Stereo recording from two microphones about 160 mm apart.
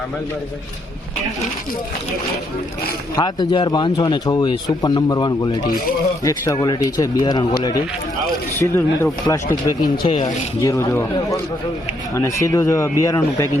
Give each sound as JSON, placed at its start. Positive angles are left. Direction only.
{"t": 3.2, "sound": "speech", "side_deg": 25}
{"t": 8.5, "sound": "speech", "side_deg": 15}
{"t": 10.6, "sound": "speech", "side_deg": 20}